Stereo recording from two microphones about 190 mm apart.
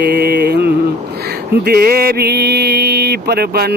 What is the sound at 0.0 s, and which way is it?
Mantra, 60° right (ahead or behind).